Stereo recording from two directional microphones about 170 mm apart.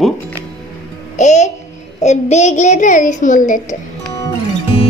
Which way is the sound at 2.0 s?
40° left (ahead or behind).